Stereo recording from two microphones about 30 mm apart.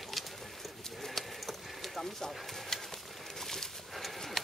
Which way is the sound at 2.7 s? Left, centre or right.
Centre.